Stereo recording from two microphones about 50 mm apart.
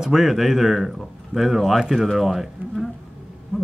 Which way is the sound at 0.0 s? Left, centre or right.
Centre.